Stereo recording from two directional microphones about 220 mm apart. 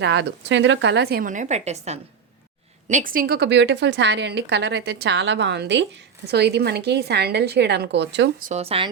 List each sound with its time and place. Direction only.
0.0 s a woman's voice: 50° right (ahead or behind)
8.4 s speech: 30° right (ahead or behind)